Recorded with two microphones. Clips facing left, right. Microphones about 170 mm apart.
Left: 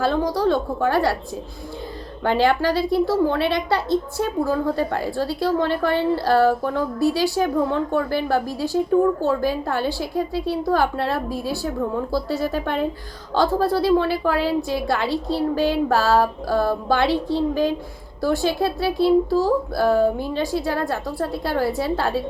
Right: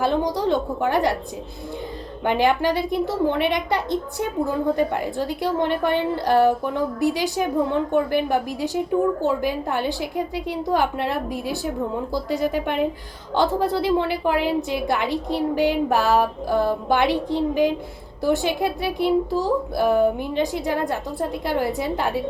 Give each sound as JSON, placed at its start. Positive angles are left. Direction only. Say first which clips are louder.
{"t": 0.0, "sound": "a woman's voice", "louder": "left 1 dB", "side_deg": -20}
{"t": 2.2, "sound": "a woman's voice", "louder": "left 1 dB", "side_deg": -15}